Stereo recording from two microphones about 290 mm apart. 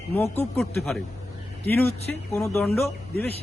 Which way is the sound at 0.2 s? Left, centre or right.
Centre.